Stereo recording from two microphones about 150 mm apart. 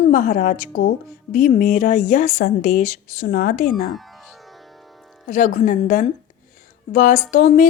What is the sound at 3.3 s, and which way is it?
Speech, 70° left (ahead or behind).